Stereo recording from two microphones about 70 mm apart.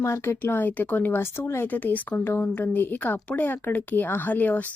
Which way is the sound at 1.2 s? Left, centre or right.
Left.